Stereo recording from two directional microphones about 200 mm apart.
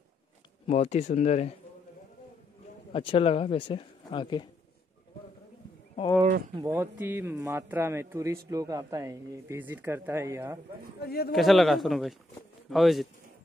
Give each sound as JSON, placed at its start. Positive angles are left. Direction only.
{"t": 0.7, "sound": "speech", "side_deg": 30}
{"t": 2.9, "sound": "speech", "side_deg": 25}
{"t": 6.5, "sound": "a man's voice", "side_deg": -15}
{"t": 11.0, "sound": "a man's voice", "side_deg": 50}
{"t": 11.3, "sound": "speech", "side_deg": 0}